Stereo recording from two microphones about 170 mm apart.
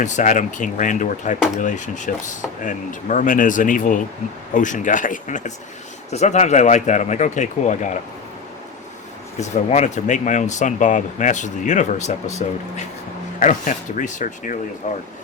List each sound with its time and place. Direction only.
0.0 s speech: 50° left (ahead or behind)
9.4 s speech: 40° left (ahead or behind)